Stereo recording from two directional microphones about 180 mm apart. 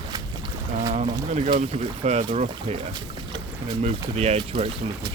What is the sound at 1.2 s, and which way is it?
Speech, 40° right (ahead or behind).